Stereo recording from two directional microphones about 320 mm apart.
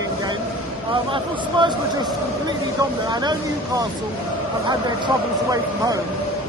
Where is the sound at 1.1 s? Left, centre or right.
Centre.